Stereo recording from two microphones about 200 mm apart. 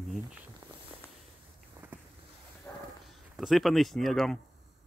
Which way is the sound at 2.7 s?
5° left (ahead or behind).